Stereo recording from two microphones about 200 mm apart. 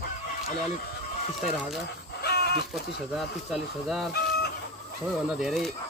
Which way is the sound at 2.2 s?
55° left (ahead or behind).